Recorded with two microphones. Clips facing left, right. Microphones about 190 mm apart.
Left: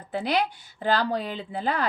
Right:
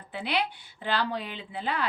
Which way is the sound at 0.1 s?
40° left (ahead or behind).